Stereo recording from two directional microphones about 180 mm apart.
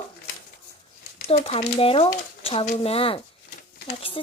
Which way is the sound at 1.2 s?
35° left (ahead or behind).